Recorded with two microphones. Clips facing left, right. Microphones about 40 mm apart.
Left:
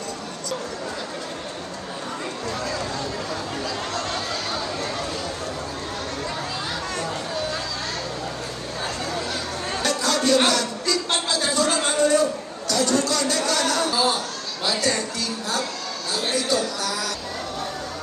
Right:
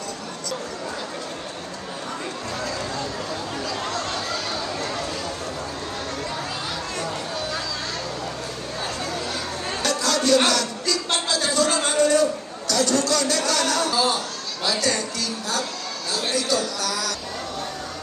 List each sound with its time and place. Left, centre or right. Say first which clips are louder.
10.0 s music: right 1 dB; left
10.8 s a sound: left 1 dB; centre
13.5 s music: even; left
16.1 s music: even; left